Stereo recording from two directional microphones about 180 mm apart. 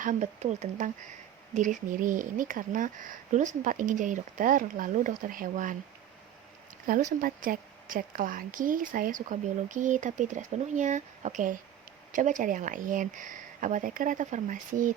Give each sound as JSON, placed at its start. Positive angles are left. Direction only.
{"t": 0.0, "sound": "speech", "side_deg": -45}
{"t": 7.2, "sound": "speech", "side_deg": -50}